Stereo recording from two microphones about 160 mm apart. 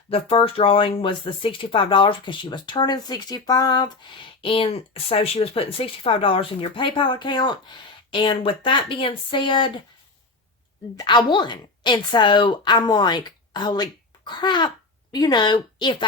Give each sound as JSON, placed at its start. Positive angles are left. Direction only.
{"t": 0.1, "sound": "speech", "side_deg": 35}
{"t": 10.9, "sound": "speech", "side_deg": 30}